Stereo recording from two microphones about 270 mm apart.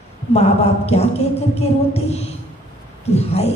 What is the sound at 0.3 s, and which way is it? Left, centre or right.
A woman's voice, left.